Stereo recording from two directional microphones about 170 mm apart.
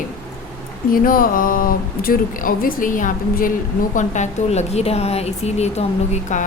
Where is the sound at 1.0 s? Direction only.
55° left (ahead or behind); by 5.8 s 40° left (ahead or behind).